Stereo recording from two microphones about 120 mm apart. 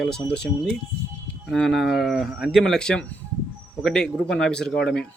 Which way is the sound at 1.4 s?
5° left (ahead or behind).